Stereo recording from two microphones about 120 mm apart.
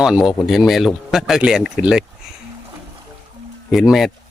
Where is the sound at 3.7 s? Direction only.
Centre (ahead or behind).